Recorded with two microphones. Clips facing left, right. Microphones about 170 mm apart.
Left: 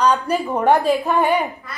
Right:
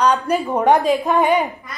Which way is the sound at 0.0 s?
15° right (ahead or behind).